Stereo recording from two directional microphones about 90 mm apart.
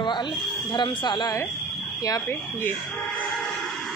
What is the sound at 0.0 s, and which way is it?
Speech, 60° left (ahead or behind).